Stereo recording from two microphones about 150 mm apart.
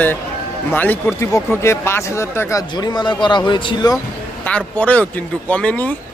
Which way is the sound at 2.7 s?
30° left (ahead or behind).